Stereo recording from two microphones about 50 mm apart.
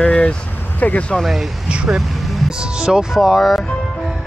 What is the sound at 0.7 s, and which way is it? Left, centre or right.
Speech, left.